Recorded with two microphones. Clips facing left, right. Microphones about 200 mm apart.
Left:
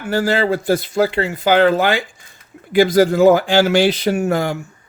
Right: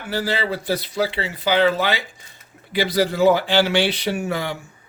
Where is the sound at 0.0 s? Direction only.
50° left (ahead or behind).